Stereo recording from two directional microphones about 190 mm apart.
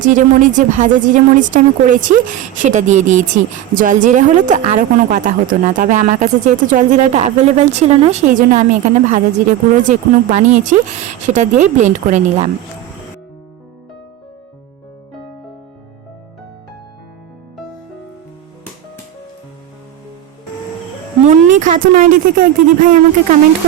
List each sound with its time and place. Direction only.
0.0 s speech: 45° right (ahead or behind)
21.2 s speech: 40° right (ahead or behind)